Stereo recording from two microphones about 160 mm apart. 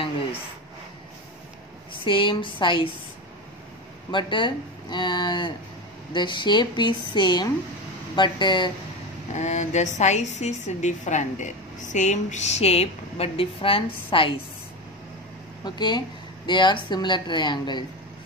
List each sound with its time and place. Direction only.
2.0 s speech: 30° left (ahead or behind)
4.1 s speech: 30° left (ahead or behind)
9.3 s a woman's voice: 45° left (ahead or behind)
15.6 s speech: 25° left (ahead or behind)